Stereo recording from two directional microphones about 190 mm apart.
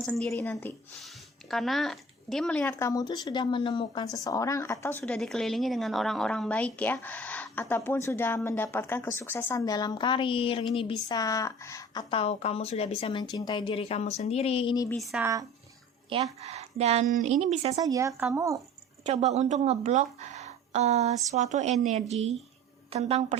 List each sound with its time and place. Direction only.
0.0 s a woman's voice: 5° left (ahead or behind)
12.1 s speech: 30° left (ahead or behind)
14.9 s speech: centre (ahead or behind)
15.2 s speech: 15° right (ahead or behind)
16.0 s a woman's voice: 30° right (ahead or behind)
17.7 s speech: 20° right (ahead or behind)
19.0 s a woman's voice: 35° right (ahead or behind)